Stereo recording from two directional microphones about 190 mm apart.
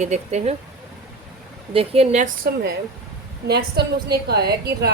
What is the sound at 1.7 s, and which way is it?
Speech, 30° right (ahead or behind).